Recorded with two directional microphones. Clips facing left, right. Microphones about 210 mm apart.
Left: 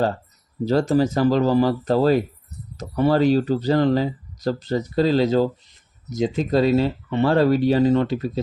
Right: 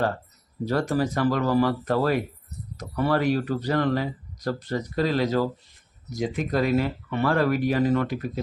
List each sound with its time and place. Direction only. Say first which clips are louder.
0.6 s speech: left 6 dB; 25° left (ahead or behind)